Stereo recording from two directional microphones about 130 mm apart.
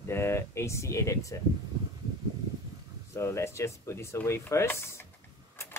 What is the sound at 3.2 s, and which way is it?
Speech, 20° left (ahead or behind).